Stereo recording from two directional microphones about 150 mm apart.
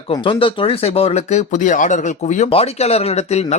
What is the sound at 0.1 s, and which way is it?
Speech, 35° left (ahead or behind).